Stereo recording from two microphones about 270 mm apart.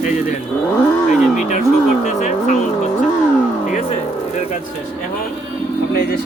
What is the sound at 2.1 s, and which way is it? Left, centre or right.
Speech, left.